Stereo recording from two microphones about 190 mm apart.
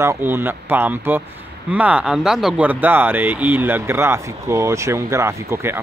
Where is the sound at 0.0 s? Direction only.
15° right (ahead or behind).